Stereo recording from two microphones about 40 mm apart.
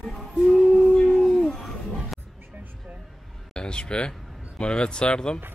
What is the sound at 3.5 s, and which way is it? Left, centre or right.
Speech, left.